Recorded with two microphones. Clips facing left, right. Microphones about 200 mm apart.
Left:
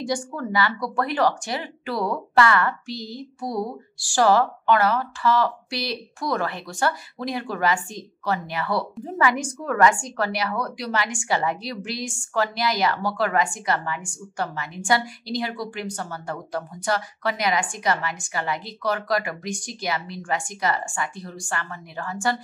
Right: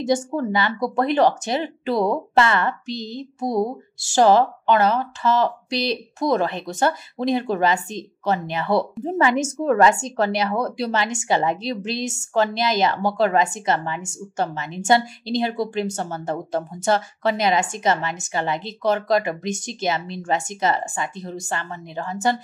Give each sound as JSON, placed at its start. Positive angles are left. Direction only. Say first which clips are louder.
{"t": 0.0, "sound": "a woman's voice", "louder": "right 6 dB", "side_deg": -25}